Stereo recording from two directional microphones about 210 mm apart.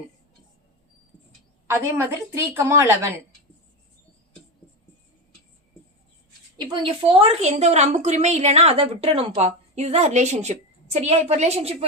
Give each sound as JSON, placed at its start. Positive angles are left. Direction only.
{"t": 1.7, "sound": "a woman's voice", "side_deg": -10}
{"t": 6.6, "sound": "a woman's voice", "side_deg": -20}